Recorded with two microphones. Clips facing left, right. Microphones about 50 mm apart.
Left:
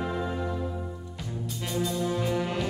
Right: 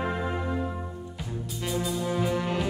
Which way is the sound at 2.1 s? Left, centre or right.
Centre.